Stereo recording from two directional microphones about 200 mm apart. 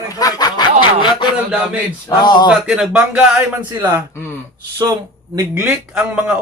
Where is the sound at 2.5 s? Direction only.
5° right (ahead or behind).